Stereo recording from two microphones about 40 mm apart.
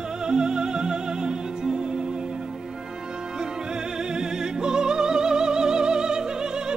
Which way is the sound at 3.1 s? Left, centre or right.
Centre.